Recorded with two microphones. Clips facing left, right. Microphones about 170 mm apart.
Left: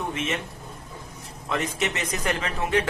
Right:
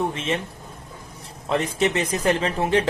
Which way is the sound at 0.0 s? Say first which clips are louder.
Right 4 dB; 30° right (ahead or behind).